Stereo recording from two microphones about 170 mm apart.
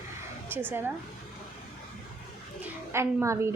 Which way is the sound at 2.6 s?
15° right (ahead or behind).